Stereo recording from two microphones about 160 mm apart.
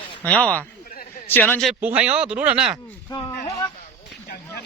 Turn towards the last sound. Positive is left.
turn(degrees=25)  # may be behind; listen again after turning